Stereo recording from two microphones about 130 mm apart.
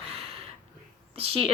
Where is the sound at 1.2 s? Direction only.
45° right (ahead or behind).